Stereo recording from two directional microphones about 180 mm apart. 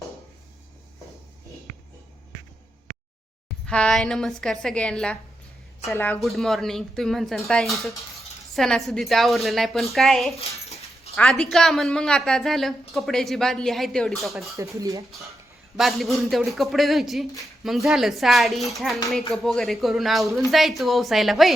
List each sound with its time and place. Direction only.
3.7 s speech: 5° left (ahead or behind)
6.1 s speech: centre (ahead or behind)
10.7 s dog: 35° left (ahead or behind)
11.1 s a woman's voice: centre (ahead or behind)
14.5 s speech: 15° right (ahead or behind)
15.8 s speech: centre (ahead or behind)